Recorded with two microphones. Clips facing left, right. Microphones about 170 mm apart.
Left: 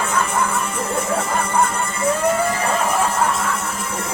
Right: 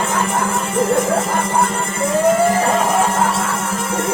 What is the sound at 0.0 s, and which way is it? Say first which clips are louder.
Music: right 2 dB; 90° right.